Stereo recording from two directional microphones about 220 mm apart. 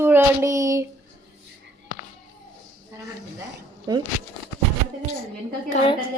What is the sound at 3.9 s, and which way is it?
Child singing, 20° right (ahead or behind).